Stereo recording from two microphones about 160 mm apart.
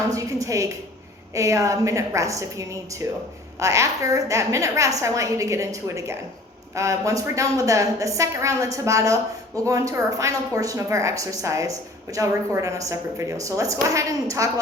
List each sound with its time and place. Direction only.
0.1 s a woman's voice: 20° right (ahead or behind)